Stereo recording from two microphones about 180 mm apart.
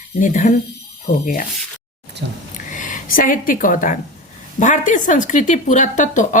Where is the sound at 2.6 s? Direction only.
45° left (ahead or behind).